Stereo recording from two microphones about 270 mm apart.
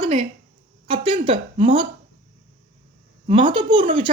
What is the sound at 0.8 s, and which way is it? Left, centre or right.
Speech, centre.